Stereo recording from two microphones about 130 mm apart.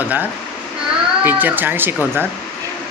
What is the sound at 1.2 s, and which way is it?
Speech, 15° right (ahead or behind).